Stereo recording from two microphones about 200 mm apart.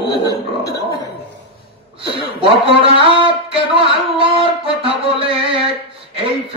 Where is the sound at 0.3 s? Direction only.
15° left (ahead or behind).